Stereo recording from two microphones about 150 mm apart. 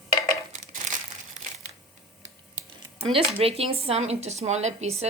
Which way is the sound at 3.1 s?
40° right (ahead or behind).